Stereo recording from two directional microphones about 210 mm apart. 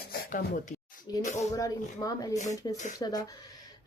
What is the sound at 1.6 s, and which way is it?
A woman's voice, 15° left (ahead or behind).